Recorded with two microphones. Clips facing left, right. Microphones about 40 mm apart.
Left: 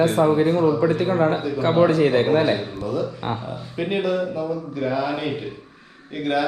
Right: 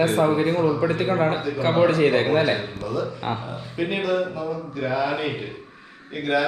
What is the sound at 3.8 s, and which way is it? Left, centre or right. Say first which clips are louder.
Speech: left 1 dB; centre.